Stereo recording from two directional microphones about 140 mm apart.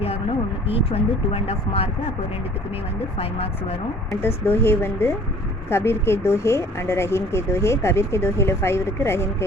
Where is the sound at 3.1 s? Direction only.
45° left (ahead or behind).